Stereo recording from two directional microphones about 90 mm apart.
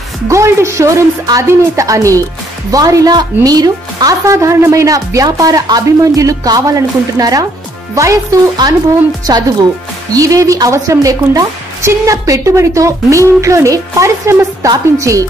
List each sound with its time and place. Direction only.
0.3 s a woman's voice: 35° right (ahead or behind)
8.6 s a woman's voice: 45° right (ahead or behind)